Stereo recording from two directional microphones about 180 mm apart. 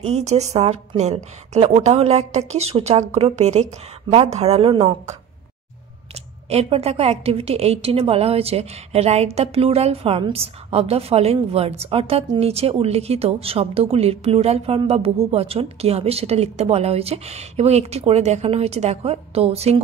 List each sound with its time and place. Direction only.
0.0 s a woman's voice: 40° right (ahead or behind)
6.5 s a woman's voice: 35° right (ahead or behind)